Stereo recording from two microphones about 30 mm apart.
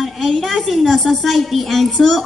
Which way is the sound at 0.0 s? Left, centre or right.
Centre.